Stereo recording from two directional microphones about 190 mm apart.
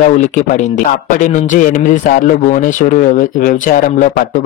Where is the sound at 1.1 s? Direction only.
40° left (ahead or behind).